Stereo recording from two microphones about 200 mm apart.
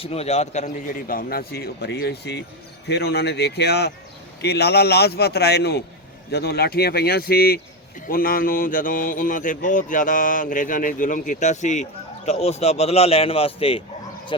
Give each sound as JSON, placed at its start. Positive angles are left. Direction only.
{"t": 0.0, "sound": "a man's voice", "side_deg": 30}